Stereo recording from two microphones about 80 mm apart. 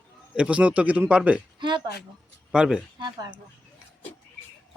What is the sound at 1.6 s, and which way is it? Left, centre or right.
Speech, right.